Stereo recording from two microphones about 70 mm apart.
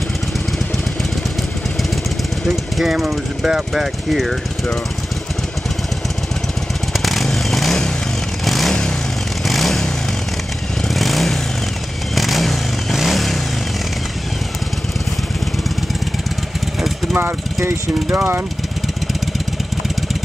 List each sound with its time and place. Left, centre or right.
2.4 s speech: centre
6.9 s vehicle: centre
10.9 s vehicle: centre
17.1 s speech: right